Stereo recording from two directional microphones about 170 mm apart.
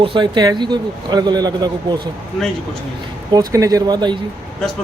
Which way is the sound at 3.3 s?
20° right (ahead or behind).